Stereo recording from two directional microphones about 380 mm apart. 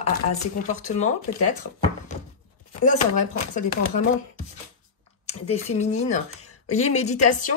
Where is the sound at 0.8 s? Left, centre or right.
Centre.